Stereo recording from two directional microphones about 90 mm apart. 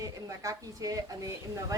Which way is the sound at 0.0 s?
40° right (ahead or behind).